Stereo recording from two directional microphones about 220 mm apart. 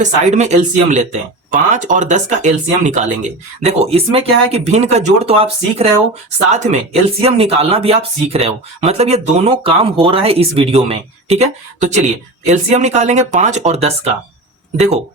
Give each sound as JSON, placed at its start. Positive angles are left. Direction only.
{"t": 0.0, "sound": "speech", "side_deg": -30}